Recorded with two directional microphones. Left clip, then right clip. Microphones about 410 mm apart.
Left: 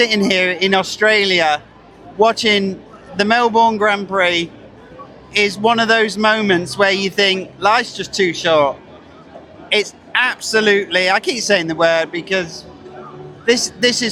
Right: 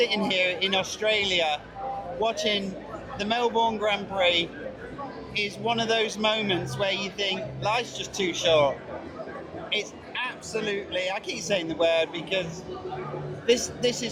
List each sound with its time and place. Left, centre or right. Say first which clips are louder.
0.0 s a man's voice: left 9 dB; left